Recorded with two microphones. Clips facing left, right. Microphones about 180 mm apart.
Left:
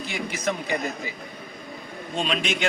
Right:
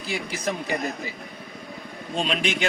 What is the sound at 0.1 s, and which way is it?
Speech, 35° right (ahead or behind).